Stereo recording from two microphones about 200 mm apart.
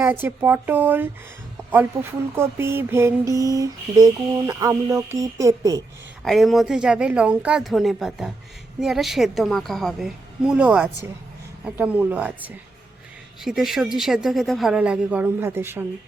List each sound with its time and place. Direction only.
0.0 s mantra: 10° right (ahead or behind)
6.2 s a woman's voice: centre (ahead or behind)
11.6 s mantra: 5° right (ahead or behind)
13.4 s a woman's voice: centre (ahead or behind)